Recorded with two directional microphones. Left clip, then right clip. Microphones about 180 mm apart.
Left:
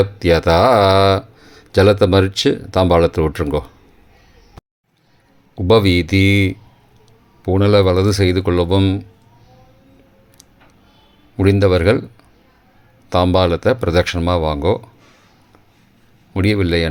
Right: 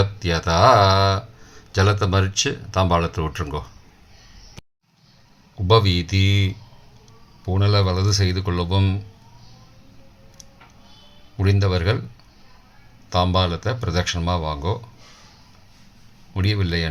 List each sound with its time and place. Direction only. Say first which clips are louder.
0.0 s speech: left 9 dB; 45° left (ahead or behind)
5.6 s speech: left 5 dB; 45° left (ahead or behind)
11.3 s speech: left 10 dB; 45° left (ahead or behind)
13.1 s speech: left 6 dB; 45° left (ahead or behind)
16.3 s speech: left 9 dB; 45° left (ahead or behind)